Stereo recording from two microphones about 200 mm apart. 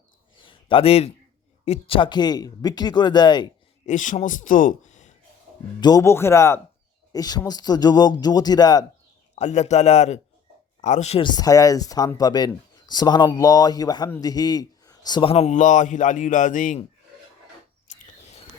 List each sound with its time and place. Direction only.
0.3 s a sound: 25° left (ahead or behind)
1.6 s speech: 30° left (ahead or behind)
3.8 s a man's voice: 40° left (ahead or behind)
5.8 s speech: 15° left (ahead or behind)
9.3 s a man's voice: 35° left (ahead or behind)